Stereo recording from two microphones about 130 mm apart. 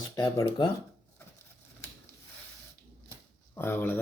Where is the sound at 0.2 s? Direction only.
25° left (ahead or behind).